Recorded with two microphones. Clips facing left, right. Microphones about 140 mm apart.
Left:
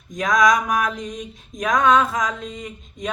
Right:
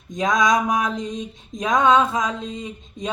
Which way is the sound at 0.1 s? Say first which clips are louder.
Left 1 dB; 25° right (ahead or behind).